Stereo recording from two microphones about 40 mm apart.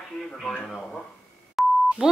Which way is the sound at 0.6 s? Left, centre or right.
Centre.